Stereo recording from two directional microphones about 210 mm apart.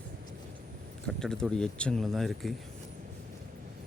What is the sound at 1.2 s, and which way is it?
Speech, 5° left (ahead or behind).